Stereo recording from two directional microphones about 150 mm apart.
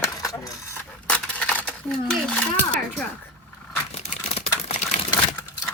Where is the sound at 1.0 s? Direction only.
10° left (ahead or behind).